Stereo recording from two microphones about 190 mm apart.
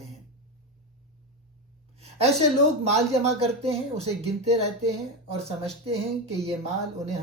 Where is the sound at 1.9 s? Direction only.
35° right (ahead or behind).